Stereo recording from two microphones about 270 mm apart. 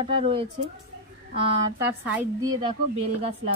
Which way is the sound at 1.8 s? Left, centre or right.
Centre.